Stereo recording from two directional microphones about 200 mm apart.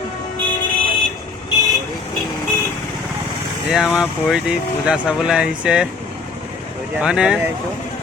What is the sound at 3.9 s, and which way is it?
Speech, centre (ahead or behind).